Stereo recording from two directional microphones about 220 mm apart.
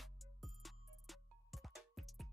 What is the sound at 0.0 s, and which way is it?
Music, centre (ahead or behind).